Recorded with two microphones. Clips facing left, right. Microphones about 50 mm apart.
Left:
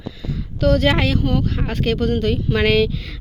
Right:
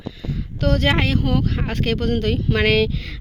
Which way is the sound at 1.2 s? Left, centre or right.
Right.